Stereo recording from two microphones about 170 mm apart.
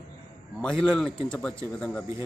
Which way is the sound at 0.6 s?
5° left (ahead or behind).